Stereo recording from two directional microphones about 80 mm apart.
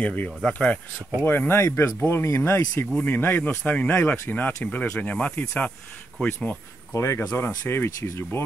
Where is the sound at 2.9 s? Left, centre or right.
Left.